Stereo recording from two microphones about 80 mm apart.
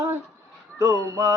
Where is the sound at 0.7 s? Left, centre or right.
Right.